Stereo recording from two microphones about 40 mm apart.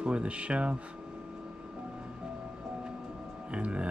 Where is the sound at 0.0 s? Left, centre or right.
Right.